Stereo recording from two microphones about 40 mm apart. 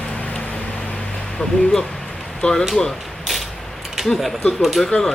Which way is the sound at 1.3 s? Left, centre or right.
Centre.